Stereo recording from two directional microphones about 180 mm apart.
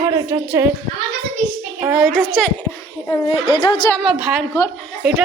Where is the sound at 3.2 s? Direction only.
30° left (ahead or behind).